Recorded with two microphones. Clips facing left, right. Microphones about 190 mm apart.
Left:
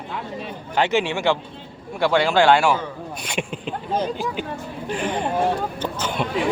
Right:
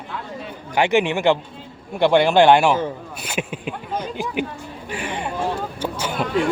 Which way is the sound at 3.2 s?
5° right (ahead or behind).